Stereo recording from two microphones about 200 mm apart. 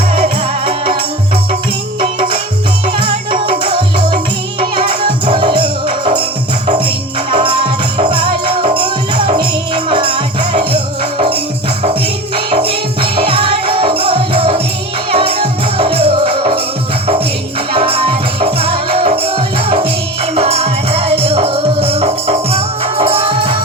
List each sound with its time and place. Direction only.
0.2 s music: 25° right (ahead or behind)
2.0 s music: 25° right (ahead or behind)
7.3 s music: 25° right (ahead or behind)
12.5 s music: 30° right (ahead or behind)
17.7 s music: 30° right (ahead or behind)